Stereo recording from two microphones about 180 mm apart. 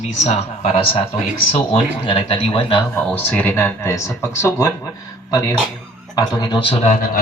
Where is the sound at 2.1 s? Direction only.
30° left (ahead or behind).